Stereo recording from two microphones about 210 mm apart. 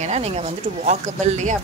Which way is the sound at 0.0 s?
30° right (ahead or behind).